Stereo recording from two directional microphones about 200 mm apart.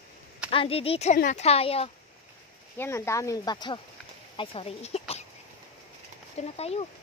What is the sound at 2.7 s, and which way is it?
Speech, 10° left (ahead or behind).